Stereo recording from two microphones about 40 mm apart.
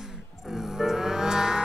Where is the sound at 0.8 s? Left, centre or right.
Centre.